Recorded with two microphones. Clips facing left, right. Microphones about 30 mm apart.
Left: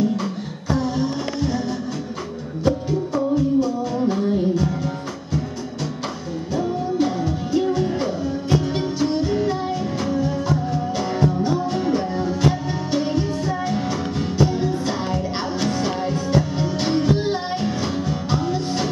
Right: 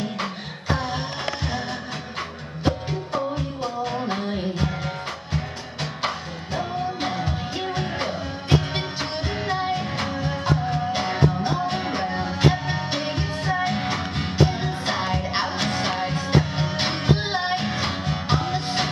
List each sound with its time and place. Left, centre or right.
0.0 s music: right
2.6 s music: right